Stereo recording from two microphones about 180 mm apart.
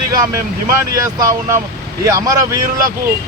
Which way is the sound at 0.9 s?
20° right (ahead or behind).